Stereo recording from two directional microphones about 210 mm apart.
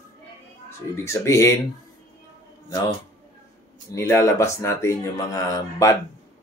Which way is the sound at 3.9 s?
15° left (ahead or behind).